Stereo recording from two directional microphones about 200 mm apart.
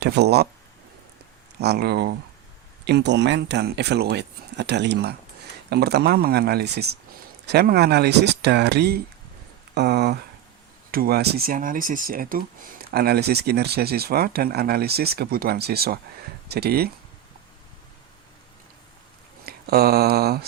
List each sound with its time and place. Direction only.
0.0 s speech: 55° right (ahead or behind)
1.5 s speech: 55° right (ahead or behind)
19.5 s a sound: 50° right (ahead or behind)